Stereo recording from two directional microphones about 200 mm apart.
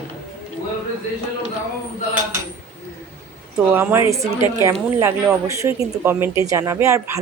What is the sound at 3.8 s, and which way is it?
Speech, 10° right (ahead or behind).